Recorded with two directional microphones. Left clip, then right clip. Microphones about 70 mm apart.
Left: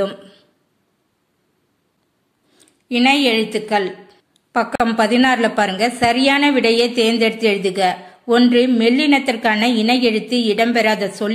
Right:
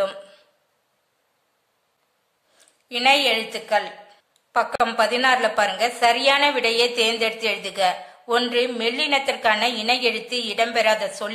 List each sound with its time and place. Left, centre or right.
2.5 s a woman's voice: left